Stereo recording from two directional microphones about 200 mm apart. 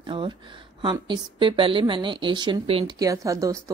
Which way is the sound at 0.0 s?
25° right (ahead or behind).